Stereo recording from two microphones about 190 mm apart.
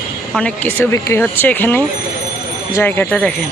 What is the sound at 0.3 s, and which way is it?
Speech, 5° left (ahead or behind).